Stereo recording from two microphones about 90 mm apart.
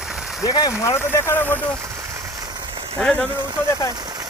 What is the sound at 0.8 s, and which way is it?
Speech, 30° left (ahead or behind).